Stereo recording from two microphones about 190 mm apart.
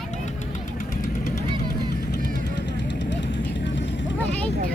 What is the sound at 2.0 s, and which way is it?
Vehicle, 60° left (ahead or behind).